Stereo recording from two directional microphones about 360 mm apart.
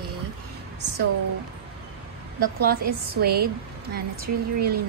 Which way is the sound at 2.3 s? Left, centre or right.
Right.